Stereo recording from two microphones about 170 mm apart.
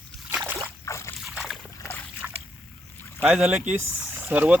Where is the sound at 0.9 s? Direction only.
15° left (ahead or behind).